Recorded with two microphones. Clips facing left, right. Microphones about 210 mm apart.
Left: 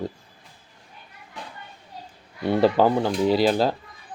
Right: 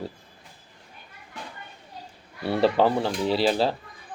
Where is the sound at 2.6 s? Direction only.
Centre (ahead or behind).